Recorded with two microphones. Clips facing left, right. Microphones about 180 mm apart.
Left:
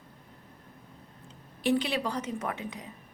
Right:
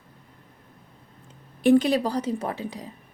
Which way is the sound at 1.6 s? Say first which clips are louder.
Right 9 dB; 45° right (ahead or behind).